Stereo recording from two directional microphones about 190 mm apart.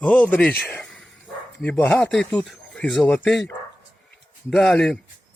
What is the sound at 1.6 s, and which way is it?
Speech, 10° left (ahead or behind).